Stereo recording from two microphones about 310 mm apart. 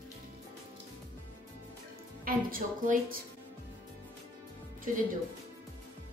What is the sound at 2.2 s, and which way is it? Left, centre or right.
Speech, right.